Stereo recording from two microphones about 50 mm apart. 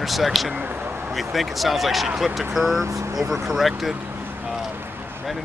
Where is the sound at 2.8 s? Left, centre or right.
Right.